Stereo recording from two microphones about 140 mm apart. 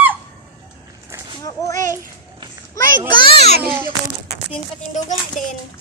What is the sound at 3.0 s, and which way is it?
Children playing, 35° left (ahead or behind).